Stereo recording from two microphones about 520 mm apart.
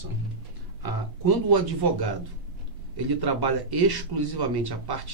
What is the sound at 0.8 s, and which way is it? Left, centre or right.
Speech, right.